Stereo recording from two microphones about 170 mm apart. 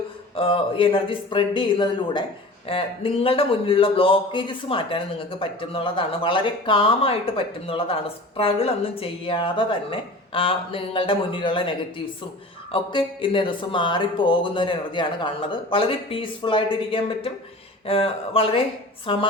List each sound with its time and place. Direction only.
0.3 s speech: 30° left (ahead or behind)
12.7 s speech: 30° left (ahead or behind)